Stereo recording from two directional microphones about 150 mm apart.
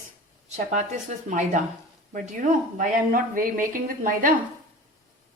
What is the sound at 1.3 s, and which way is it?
Speech, 55° right (ahead or behind).